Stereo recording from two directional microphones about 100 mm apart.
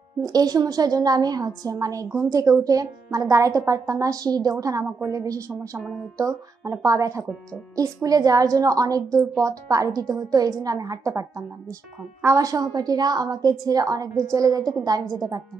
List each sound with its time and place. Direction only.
0.2 s a woman's voice: 40° right (ahead or behind)
5.8 s speech: centre (ahead or behind)
6.1 s a woman's voice: 35° right (ahead or behind)